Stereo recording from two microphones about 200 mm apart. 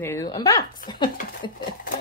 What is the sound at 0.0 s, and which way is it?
A woman's voice, 10° left (ahead or behind).